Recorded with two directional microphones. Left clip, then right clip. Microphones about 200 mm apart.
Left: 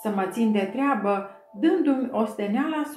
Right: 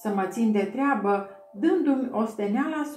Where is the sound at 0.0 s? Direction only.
5° right (ahead or behind).